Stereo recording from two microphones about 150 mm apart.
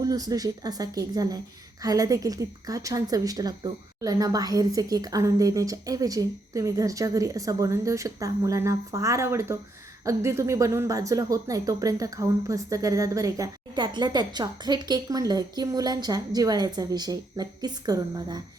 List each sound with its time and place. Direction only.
0.0 s speech: 25° right (ahead or behind)